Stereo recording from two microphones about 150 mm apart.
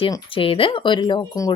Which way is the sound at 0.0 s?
35° left (ahead or behind).